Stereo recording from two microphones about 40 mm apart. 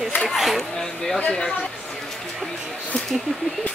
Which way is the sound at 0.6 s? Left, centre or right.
Centre.